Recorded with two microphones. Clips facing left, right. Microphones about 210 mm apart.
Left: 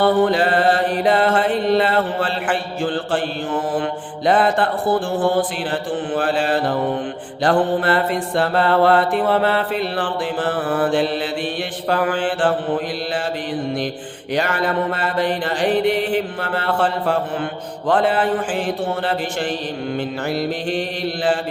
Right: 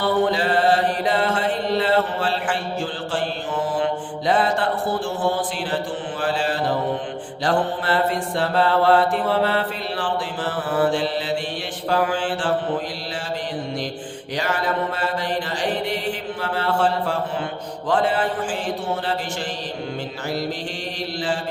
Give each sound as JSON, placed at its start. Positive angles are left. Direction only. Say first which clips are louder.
{"t": 0.0, "sound": "mantra", "louder": "left 4 dB", "side_deg": 55}
{"t": 14.3, "sound": "mantra", "louder": "left 4 dB", "side_deg": 60}